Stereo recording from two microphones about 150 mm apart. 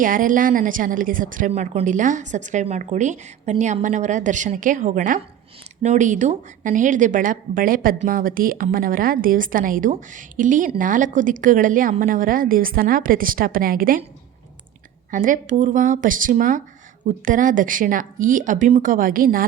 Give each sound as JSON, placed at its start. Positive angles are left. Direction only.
{"t": 0.0, "sound": "a woman's voice", "side_deg": -65}
{"t": 15.1, "sound": "a woman's voice", "side_deg": -60}